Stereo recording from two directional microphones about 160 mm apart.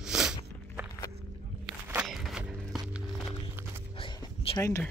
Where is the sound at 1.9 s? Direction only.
Centre (ahead or behind).